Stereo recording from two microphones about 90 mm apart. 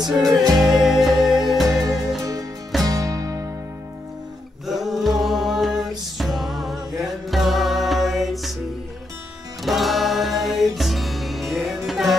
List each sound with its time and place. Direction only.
0.2 s music: 40° right (ahead or behind)
0.6 s music: centre (ahead or behind)
2.8 s music: 40° right (ahead or behind)
4.6 s music: centre (ahead or behind)
9.7 s music: centre (ahead or behind)